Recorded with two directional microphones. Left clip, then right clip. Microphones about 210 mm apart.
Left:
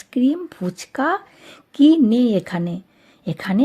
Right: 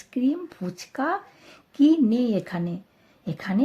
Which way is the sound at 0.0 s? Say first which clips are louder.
Left 6 dB; 30° left (ahead or behind).